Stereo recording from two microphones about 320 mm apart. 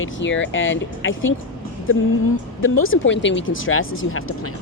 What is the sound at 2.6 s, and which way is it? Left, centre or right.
Speech, left.